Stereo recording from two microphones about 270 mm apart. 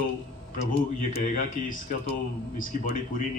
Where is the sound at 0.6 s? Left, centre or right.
Left.